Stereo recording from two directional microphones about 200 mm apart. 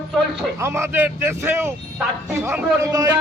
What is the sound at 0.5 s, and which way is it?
A man's voice, 10° right (ahead or behind).